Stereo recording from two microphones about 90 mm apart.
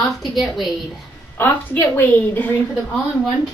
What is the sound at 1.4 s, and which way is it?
A woman's voice, 20° left (ahead or behind).